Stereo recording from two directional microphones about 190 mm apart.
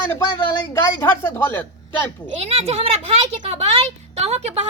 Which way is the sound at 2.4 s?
30° right (ahead or behind).